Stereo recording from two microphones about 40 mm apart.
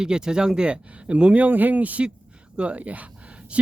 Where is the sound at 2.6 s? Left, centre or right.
Right.